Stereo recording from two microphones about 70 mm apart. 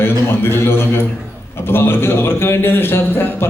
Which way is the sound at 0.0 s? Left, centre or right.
Left.